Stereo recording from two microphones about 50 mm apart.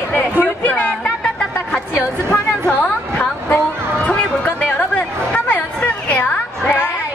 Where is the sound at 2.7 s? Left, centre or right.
Left.